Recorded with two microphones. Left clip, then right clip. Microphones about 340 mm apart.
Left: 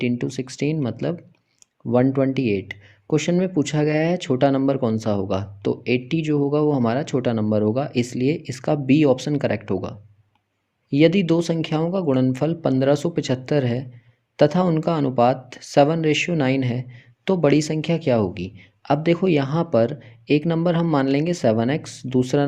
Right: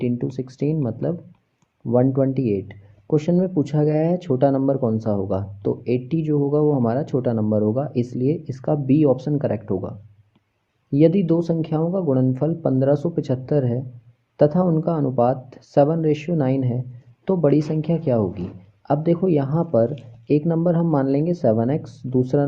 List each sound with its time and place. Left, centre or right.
0.2 s speech: left
10.9 s speech: left